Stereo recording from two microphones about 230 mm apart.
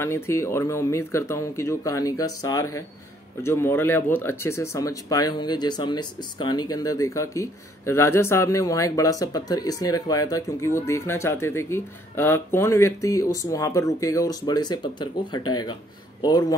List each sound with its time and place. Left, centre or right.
0.0 s speech: centre